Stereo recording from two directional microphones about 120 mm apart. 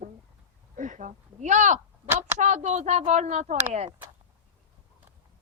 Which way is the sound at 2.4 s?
85° right.